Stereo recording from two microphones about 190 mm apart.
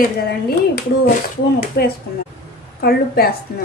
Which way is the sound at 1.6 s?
55° left (ahead or behind).